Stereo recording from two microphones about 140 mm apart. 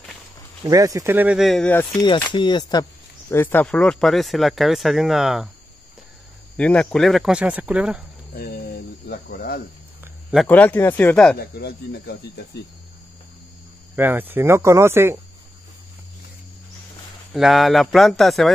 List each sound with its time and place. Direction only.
0.7 s speech: 25° right (ahead or behind); by 1.7 s centre (ahead or behind)
2.0 s speech: 35° left (ahead or behind)
3.3 s speech: 15° left (ahead or behind)
3.6 s speech: 5° left (ahead or behind)
6.5 s speech: 5° left (ahead or behind)
8.4 s cricket: 90° left
10.5 s speech: 15° left (ahead or behind)
13.9 s speech: 15° right (ahead or behind)
17.3 s speech: centre (ahead or behind)